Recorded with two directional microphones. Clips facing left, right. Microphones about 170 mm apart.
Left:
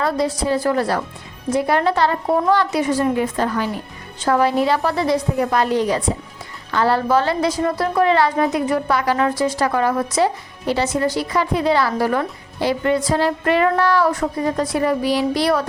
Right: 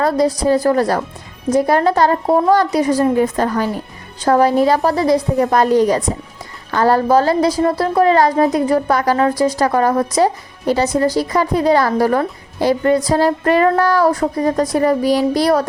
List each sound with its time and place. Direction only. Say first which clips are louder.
0.0 s a woman's voice: right 5 dB; 40° right (ahead or behind)